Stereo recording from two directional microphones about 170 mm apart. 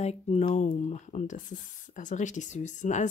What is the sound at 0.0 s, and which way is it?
Speech, 40° left (ahead or behind).